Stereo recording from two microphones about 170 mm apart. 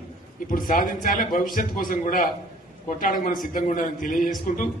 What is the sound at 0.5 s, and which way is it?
A man's voice, 55° left (ahead or behind).